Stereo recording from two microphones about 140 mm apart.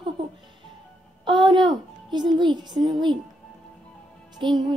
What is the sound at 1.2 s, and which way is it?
A woman's voice, 35° right (ahead or behind).